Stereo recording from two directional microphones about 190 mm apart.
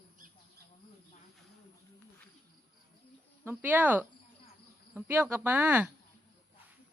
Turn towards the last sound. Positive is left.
turn(degrees=-10)  # may be behind; listen again after turning